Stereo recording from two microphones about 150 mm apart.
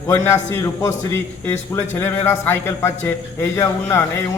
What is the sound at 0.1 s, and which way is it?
A man's voice, 20° left (ahead or behind).